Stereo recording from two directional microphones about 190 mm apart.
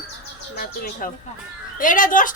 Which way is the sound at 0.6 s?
50° left (ahead or behind).